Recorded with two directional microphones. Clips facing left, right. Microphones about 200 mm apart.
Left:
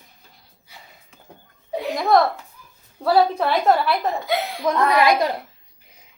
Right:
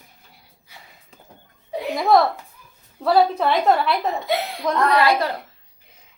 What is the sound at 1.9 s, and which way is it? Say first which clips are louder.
A child's voice: right 1 dB; centre (ahead or behind).